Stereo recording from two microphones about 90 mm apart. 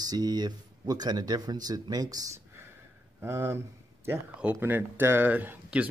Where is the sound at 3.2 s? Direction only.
30° right (ahead or behind).